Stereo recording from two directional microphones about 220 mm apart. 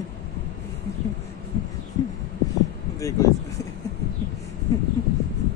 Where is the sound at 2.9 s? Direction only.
15° left (ahead or behind).